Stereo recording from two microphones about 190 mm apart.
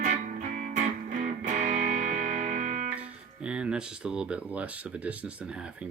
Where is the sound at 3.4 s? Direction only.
5° right (ahead or behind).